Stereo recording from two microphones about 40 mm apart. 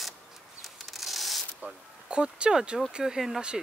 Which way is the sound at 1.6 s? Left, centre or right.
Right.